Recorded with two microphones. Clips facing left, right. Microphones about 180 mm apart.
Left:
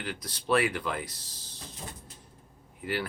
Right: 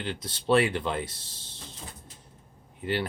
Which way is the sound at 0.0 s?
25° right (ahead or behind).